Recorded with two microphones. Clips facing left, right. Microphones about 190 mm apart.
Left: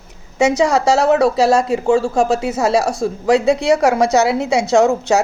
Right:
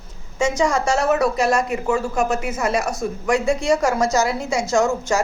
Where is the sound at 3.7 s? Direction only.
65° left (ahead or behind).